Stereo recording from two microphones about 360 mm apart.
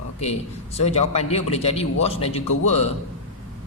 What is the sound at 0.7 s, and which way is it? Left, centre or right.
A man's voice, centre.